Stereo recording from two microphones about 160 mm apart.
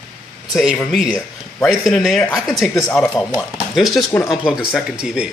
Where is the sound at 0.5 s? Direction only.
5° left (ahead or behind).